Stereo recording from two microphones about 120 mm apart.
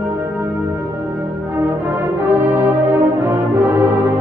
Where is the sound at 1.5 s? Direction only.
15° right (ahead or behind).